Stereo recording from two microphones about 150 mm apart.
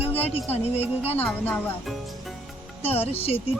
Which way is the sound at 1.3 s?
10° left (ahead or behind).